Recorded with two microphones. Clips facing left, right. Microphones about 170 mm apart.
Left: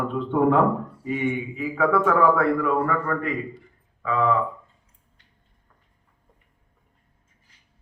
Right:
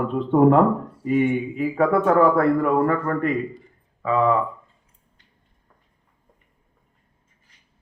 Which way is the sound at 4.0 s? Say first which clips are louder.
Right 3 dB; 35° right (ahead or behind).